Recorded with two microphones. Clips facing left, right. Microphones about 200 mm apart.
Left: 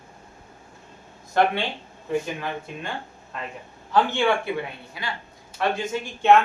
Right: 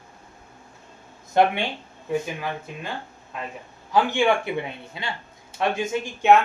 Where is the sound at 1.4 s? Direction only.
20° right (ahead or behind).